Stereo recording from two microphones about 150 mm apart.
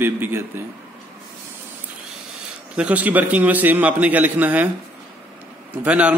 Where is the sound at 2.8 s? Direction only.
10° right (ahead or behind).